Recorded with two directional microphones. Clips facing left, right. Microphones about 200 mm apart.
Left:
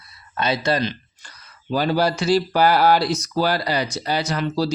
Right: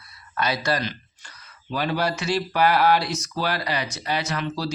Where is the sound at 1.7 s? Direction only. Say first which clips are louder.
Left 5 dB; 35° left (ahead or behind).